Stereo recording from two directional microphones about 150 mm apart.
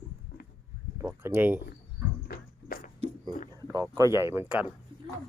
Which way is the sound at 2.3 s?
70° left (ahead or behind).